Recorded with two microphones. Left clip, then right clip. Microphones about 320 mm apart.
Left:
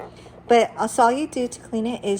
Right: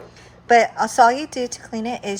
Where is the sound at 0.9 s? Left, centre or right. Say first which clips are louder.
Right 3 dB; right.